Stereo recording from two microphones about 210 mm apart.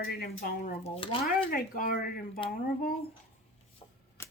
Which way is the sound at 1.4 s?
40° left (ahead or behind).